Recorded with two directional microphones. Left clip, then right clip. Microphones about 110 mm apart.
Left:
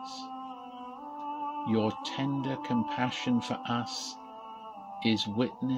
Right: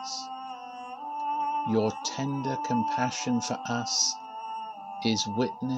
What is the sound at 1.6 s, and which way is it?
Speech, 30° right (ahead or behind).